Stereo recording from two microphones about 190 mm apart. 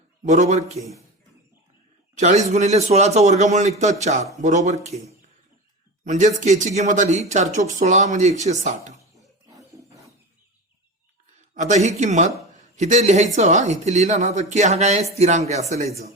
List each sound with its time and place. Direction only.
0.3 s speech: 40° right (ahead or behind)
2.1 s speech: 35° right (ahead or behind)
9.5 s wild animals: 15° right (ahead or behind)
11.5 s speech: 40° right (ahead or behind)